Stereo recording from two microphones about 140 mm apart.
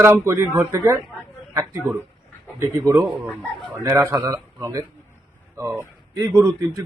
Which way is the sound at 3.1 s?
Centre (ahead or behind).